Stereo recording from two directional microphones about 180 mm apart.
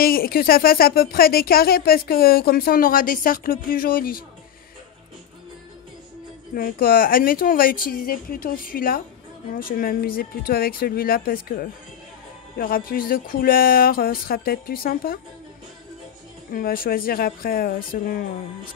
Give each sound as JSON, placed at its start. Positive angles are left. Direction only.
{"t": 0.0, "sound": "speech", "side_deg": 55}
{"t": 6.5, "sound": "speech", "side_deg": 55}
{"t": 16.5, "sound": "speech", "side_deg": 55}